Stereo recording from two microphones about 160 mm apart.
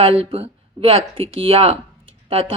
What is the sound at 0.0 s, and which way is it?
A woman's voice, 35° right (ahead or behind).